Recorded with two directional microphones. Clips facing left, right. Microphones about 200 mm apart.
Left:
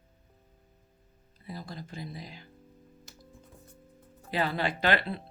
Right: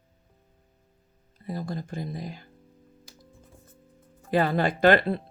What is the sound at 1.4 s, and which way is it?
Speech, 50° right (ahead or behind).